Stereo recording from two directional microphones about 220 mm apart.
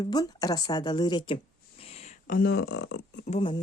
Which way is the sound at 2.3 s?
45° left (ahead or behind).